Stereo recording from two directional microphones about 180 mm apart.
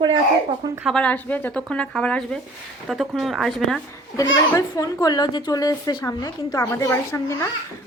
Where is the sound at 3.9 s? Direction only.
20° left (ahead or behind).